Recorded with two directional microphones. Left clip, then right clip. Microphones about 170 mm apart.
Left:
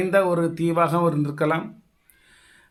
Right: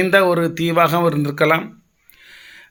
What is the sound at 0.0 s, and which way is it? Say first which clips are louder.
Speech: right 5 dB; 40° right (ahead or behind).